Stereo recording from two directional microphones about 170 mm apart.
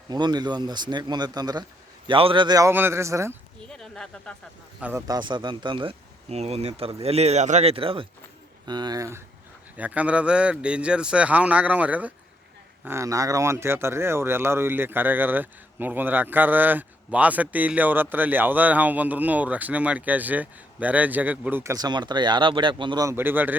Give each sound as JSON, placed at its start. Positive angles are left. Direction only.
{"t": 0.1, "sound": "speech", "side_deg": -25}
{"t": 3.7, "sound": "speech", "side_deg": 5}
{"t": 4.8, "sound": "speech", "side_deg": -15}